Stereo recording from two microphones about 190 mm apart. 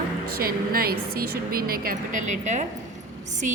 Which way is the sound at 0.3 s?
50° right (ahead or behind).